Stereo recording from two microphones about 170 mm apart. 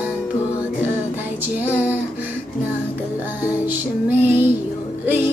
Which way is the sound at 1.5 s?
10° right (ahead or behind).